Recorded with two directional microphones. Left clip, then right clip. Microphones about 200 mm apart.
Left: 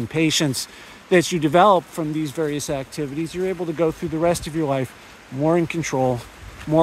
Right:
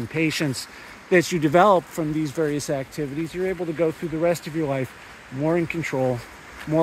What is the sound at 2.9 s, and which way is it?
Speech, 25° left (ahead or behind).